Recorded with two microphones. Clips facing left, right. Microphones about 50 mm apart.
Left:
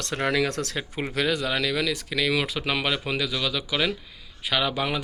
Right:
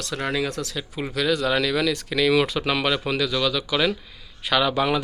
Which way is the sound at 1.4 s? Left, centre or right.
Centre.